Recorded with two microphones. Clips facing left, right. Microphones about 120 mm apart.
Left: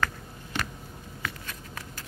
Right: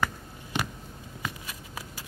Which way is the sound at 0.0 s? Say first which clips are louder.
Even; 10° right (ahead or behind).